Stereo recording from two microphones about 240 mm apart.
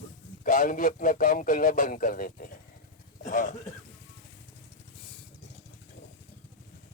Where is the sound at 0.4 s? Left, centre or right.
Left.